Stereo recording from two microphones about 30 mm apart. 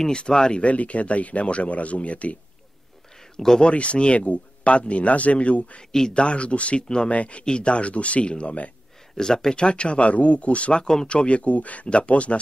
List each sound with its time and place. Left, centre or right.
0.3 s speech: left
0.6 s speech: left
3.3 s speech: centre
3.7 s speech: left
5.8 s speech: left
6.1 s speech: left
7.4 s speech: left
9.1 s speech: centre
9.6 s speech: left
10.8 s speech: centre
11.1 s speech: left